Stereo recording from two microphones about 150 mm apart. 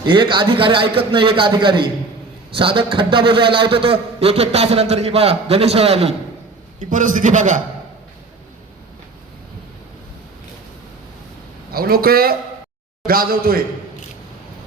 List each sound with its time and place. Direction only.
0.0 s a man's voice: 30° right (ahead or behind)
6.7 s a man's voice: 60° right (ahead or behind)
11.7 s speech: 85° right